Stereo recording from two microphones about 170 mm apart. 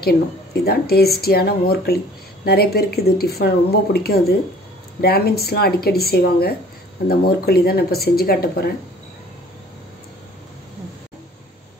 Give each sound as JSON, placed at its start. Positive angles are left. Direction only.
{"t": 0.0, "sound": "speech", "side_deg": 70}